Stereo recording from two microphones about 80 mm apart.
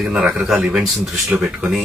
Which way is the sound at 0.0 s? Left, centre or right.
Centre.